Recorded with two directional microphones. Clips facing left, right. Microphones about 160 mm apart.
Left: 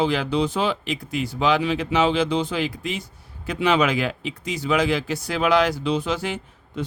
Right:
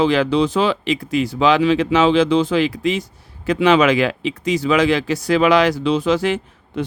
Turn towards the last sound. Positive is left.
turn(degrees=-90)